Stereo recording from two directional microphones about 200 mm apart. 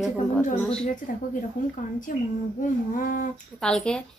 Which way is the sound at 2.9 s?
45° left (ahead or behind).